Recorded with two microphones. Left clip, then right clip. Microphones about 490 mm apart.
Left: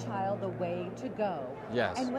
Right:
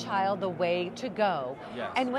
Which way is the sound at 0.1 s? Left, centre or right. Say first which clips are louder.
Right 6 dB; right.